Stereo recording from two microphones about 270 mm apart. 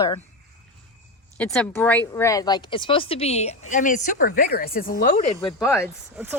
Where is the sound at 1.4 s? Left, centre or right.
Centre.